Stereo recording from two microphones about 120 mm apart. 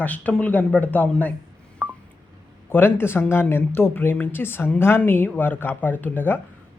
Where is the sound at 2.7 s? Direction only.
20° left (ahead or behind).